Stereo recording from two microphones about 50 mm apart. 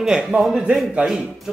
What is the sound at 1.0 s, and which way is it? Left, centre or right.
Speech, right.